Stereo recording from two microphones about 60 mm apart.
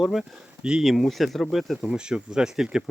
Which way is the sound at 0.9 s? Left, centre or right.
Centre.